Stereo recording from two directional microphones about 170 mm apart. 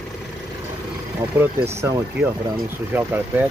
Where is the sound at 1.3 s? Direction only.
15° right (ahead or behind).